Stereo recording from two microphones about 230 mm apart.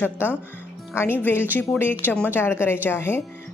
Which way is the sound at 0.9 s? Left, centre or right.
Centre.